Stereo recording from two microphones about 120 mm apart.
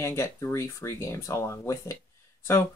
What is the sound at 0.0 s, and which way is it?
Speech, 20° left (ahead or behind).